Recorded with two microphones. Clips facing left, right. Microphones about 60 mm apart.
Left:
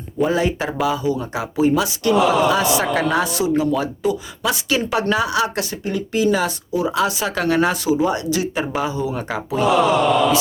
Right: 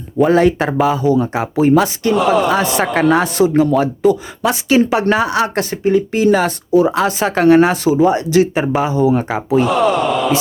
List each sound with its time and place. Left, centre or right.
0.2 s speech: right
0.7 s speech: right
2.1 s speech: centre
2.5 s speech: right
4.5 s speech: right
6.2 s speech: right
9.6 s speech: centre